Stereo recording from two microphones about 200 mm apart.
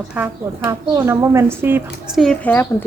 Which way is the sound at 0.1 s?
10° right (ahead or behind).